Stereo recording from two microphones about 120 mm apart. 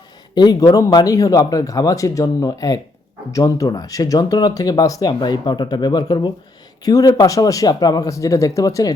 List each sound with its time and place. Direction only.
0.3 s speech: 35° left (ahead or behind)